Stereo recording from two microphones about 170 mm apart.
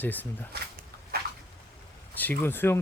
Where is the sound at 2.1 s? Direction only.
10° left (ahead or behind).